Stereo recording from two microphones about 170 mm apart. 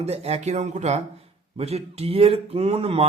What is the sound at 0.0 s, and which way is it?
Speech, 40° right (ahead or behind).